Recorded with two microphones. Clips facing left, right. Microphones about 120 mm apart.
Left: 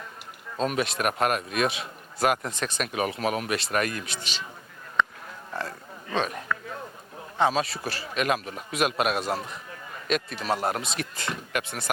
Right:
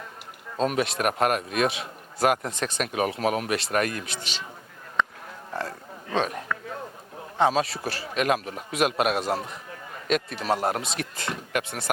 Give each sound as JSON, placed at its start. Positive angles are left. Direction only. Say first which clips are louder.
{"t": 0.7, "sound": "a man's voice", "louder": "right 2 dB", "side_deg": -50}
{"t": 5.5, "sound": "a sound", "louder": "right 2 dB", "side_deg": -40}
{"t": 7.3, "sound": "a man's voice", "louder": "right 2 dB", "side_deg": -50}
{"t": 9.4, "sound": "a man's voice", "louder": "right 1 dB", "side_deg": -40}